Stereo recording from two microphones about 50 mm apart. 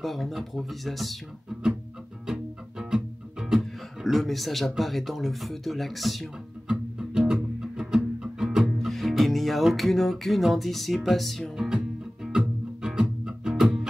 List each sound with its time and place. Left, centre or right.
0.0 s speech: centre
2.2 s music: centre
6.7 s music: centre
8.7 s music: centre
11.5 s music: centre